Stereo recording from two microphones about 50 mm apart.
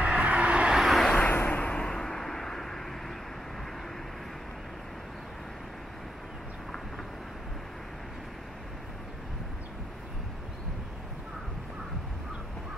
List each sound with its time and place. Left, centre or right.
0.0 s vehicle: right
0.7 s vehicle: centre
1.3 s vehicle: left
1.6 s vehicle: centre